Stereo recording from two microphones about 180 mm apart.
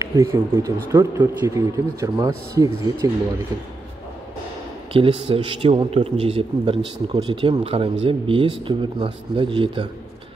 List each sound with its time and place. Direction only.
0.0 s speech: 15° right (ahead or behind)
4.9 s a man's voice: 30° right (ahead or behind)